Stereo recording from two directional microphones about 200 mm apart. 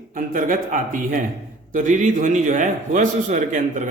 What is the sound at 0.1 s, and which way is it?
A man's voice, 45° right (ahead or behind).